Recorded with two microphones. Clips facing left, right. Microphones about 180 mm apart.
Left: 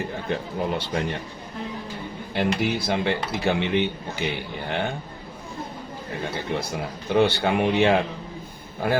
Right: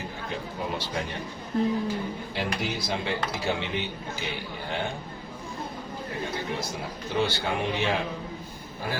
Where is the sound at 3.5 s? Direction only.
60° left (ahead or behind).